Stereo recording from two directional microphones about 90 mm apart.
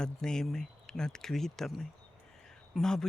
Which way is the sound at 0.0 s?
5° left (ahead or behind).